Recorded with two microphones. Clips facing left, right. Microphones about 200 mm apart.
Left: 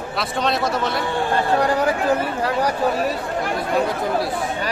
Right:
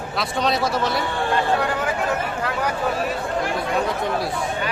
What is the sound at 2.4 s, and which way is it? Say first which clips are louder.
Speech: left 4 dB; 35° left (ahead or behind).